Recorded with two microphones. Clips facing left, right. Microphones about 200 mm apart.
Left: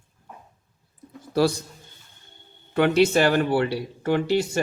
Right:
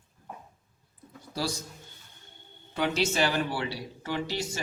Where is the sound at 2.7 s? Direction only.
60° left (ahead or behind).